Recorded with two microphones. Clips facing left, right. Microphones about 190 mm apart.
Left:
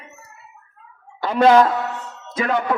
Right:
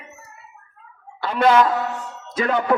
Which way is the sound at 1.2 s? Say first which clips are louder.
Left 3 dB; 35° left (ahead or behind).